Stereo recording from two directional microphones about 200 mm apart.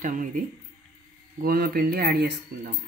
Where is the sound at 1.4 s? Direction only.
50° right (ahead or behind).